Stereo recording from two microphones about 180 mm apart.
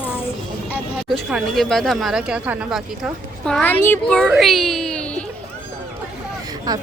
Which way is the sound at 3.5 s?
5° left (ahead or behind).